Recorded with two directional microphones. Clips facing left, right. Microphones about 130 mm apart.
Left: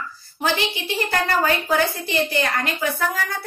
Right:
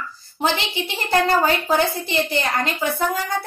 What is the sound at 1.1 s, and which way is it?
Speech, 25° right (ahead or behind).